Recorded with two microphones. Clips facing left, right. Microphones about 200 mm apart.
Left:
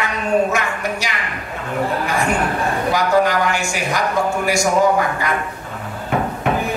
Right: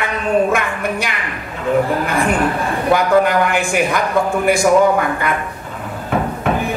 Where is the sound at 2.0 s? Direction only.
55° right (ahead or behind).